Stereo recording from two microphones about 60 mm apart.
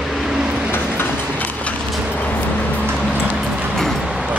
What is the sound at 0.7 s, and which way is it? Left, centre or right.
Train, left.